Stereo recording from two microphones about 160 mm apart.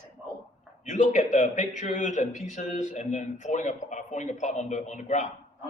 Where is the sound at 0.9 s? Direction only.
50° left (ahead or behind).